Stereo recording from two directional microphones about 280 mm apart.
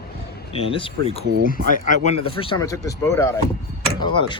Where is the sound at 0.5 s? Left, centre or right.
Centre.